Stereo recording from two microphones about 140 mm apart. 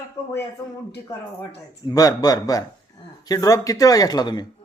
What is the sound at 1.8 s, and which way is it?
Speech, 25° left (ahead or behind).